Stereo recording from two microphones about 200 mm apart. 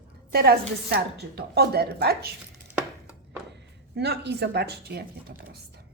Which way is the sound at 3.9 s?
55° right (ahead or behind).